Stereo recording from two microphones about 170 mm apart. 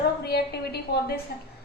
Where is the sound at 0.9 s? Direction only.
80° left.